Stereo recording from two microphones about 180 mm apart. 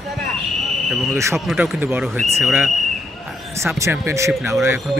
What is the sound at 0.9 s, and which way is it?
Speech, centre (ahead or behind).